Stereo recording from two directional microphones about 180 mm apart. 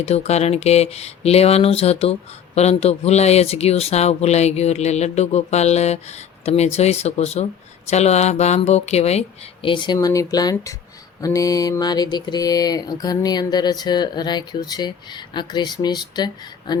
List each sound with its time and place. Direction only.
0.0 s speech: 35° left (ahead or behind)